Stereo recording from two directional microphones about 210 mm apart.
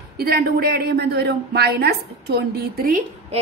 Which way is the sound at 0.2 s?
45° right (ahead or behind).